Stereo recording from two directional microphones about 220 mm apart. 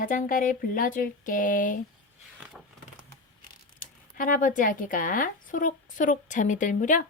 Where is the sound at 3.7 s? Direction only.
35° left (ahead or behind).